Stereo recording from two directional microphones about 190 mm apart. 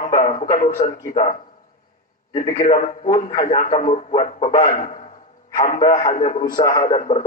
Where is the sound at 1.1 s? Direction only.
45° left (ahead or behind).